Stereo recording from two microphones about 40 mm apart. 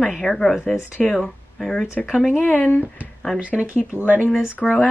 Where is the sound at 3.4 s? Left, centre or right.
Right.